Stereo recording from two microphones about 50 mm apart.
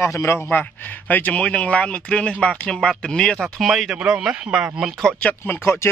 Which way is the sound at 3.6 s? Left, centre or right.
Centre.